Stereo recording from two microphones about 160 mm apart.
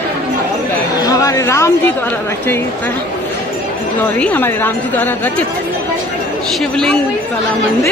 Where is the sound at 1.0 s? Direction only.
20° left (ahead or behind).